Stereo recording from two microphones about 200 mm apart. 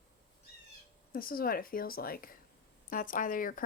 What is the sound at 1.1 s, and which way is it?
Speech, 45° left (ahead or behind).